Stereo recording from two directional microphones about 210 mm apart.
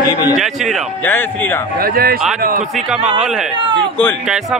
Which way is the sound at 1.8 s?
45° right (ahead or behind).